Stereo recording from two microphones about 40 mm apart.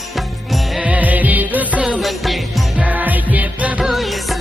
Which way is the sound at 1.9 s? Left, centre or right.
Centre.